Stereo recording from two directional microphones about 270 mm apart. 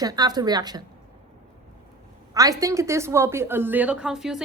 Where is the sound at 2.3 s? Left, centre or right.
Centre.